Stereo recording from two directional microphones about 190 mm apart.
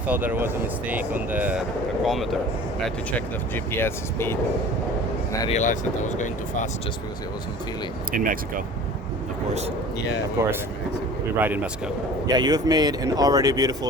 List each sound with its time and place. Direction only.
0.1 s speech: 10° right (ahead or behind); by 4.4 s 15° left (ahead or behind)
5.5 s speech: 40° left (ahead or behind)
8.1 s speech: 45° right (ahead or behind)
11.3 s speech: 10° right (ahead or behind)
12.3 s speech: 20° right (ahead or behind)